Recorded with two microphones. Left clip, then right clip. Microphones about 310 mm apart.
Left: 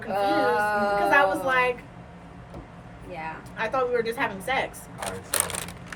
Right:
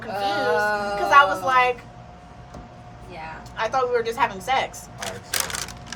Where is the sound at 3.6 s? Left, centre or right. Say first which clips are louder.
Right 3 dB; centre.